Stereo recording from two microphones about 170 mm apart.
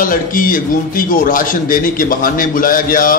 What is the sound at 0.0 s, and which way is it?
Speech, 55° left (ahead or behind).